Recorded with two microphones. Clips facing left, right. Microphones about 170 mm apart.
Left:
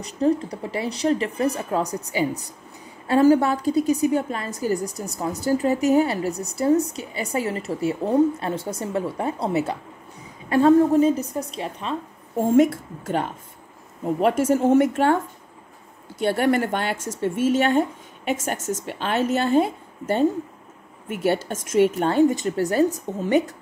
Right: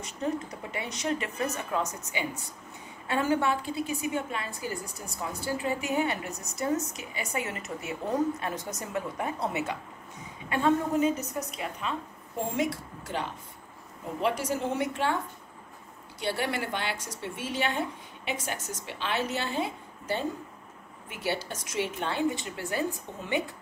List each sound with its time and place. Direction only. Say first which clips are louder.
0.0 s a woman's voice: left 10 dB; 35° left (ahead or behind)
12.4 s speech: left 12 dB; 50° left (ahead or behind)
16.2 s speech: left 10 dB; 50° left (ahead or behind)